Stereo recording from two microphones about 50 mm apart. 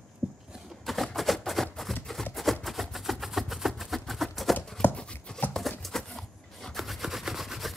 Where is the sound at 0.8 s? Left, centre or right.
Centre.